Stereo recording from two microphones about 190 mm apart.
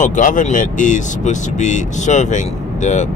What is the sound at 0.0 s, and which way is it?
Speech, 40° left (ahead or behind).